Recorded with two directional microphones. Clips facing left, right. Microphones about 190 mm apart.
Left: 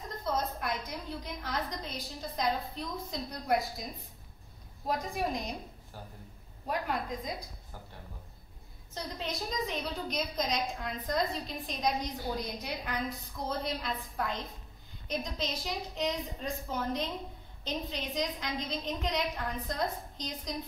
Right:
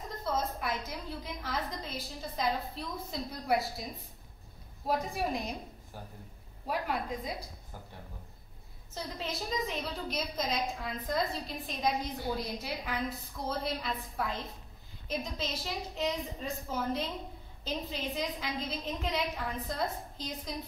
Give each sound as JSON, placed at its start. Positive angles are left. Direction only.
{"t": 0.2, "sound": "a woman's voice", "side_deg": -5}
{"t": 4.8, "sound": "a woman's voice", "side_deg": -5}
{"t": 6.7, "sound": "a woman's voice", "side_deg": -5}
{"t": 8.9, "sound": "a woman's voice", "side_deg": -5}